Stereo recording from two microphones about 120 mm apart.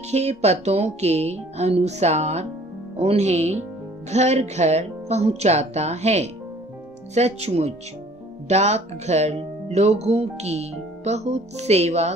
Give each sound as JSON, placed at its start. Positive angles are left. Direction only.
{"t": 0.1, "sound": "speech", "side_deg": -65}